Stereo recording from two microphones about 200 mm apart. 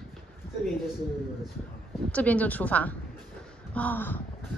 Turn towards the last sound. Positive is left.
turn(degrees=10)  # may be behind; listen again after turning